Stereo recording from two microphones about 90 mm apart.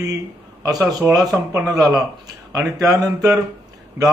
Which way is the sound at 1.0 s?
45° right (ahead or behind).